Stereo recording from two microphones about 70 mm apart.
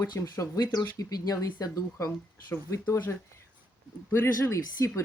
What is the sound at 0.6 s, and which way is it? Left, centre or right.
Speech, left.